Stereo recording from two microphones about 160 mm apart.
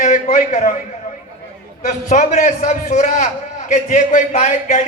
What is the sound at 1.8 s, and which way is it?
A man's voice, 50° left (ahead or behind).